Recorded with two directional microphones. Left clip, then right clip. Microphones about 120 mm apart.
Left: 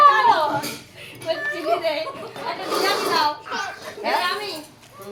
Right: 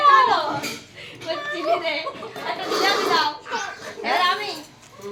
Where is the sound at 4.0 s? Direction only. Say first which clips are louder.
Right 2 dB; 30° right (ahead or behind).